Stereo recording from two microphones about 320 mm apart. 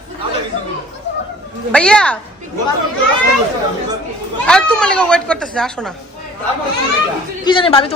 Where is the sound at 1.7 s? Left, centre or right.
Centre.